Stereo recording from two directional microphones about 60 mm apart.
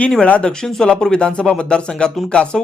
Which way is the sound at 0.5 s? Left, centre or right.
Centre.